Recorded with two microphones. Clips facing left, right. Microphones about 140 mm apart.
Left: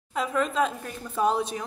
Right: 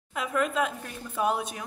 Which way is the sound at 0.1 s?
5° right (ahead or behind).